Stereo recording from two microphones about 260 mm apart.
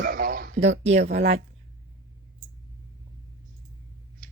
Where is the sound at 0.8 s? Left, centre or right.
Right.